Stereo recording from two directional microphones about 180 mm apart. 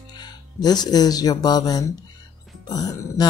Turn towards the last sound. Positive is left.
turn(degrees=20)  # may be behind; listen again after turning